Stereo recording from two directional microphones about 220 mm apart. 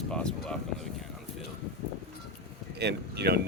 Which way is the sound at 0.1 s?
5° left (ahead or behind).